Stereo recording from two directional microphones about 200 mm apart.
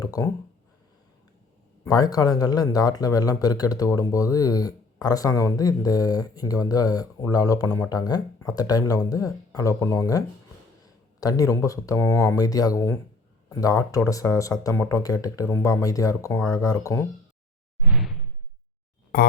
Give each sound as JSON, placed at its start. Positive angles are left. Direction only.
{"t": 0.0, "sound": "a sound", "side_deg": 20}
{"t": 1.8, "sound": "speech", "side_deg": 20}
{"t": 17.8, "sound": "whoosh", "side_deg": -5}